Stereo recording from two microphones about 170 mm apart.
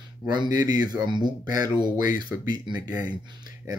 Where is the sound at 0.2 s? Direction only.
25° right (ahead or behind).